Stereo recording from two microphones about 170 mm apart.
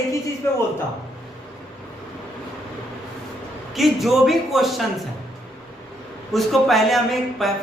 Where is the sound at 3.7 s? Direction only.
Centre (ahead or behind).